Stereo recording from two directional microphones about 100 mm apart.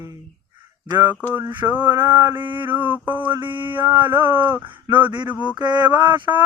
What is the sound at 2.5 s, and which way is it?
Speech, 20° right (ahead or behind).